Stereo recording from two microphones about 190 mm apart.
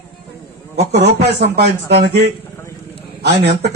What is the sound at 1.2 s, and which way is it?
Speech, 60° right (ahead or behind).